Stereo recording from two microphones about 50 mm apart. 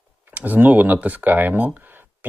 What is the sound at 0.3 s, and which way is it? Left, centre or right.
Speech, right.